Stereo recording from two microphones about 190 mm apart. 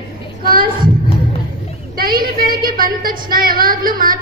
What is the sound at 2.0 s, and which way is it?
A woman's voice, 50° right (ahead or behind).